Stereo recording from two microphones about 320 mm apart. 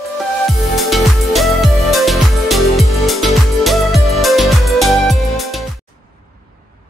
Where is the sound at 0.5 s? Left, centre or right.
Centre.